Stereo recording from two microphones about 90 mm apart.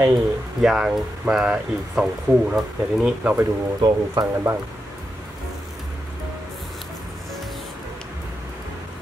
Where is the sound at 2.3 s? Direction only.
25° right (ahead or behind).